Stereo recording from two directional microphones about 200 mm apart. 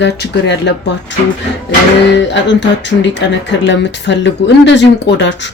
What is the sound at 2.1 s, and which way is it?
Speech, 60° left (ahead or behind).